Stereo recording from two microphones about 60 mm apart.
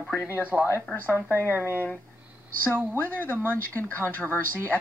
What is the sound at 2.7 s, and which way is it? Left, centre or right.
Speech, right.